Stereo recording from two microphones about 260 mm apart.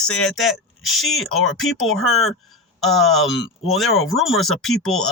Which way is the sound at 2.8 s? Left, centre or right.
Centre.